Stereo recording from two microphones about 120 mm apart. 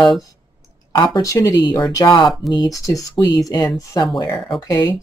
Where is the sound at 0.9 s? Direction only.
35° left (ahead or behind).